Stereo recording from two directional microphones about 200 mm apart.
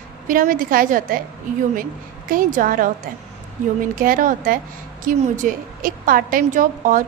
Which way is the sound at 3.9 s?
45° right (ahead or behind).